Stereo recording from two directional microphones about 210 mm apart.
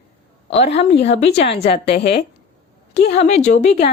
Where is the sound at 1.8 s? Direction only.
50° left (ahead or behind).